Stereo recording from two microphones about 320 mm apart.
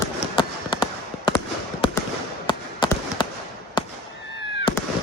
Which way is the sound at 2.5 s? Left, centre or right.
Centre.